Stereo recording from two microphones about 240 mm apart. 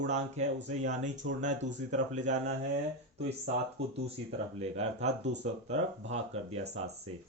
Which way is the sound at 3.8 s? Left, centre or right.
Right.